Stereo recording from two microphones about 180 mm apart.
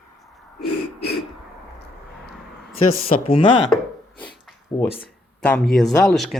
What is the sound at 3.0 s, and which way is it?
Speech, 30° left (ahead or behind).